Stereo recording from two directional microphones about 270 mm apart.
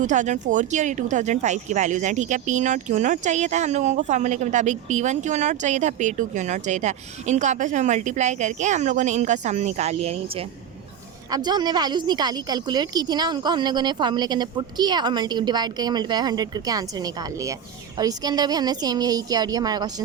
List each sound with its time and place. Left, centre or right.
0.0 s a woman's voice: right